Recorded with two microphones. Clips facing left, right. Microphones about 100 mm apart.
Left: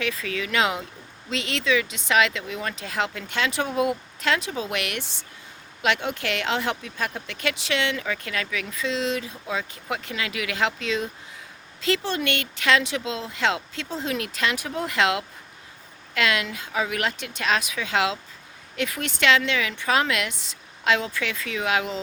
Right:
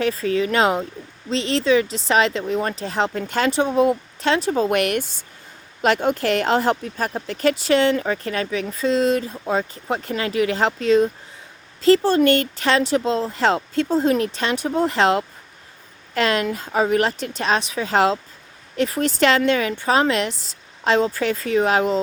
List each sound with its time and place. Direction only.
0.0 s speech: 35° right (ahead or behind)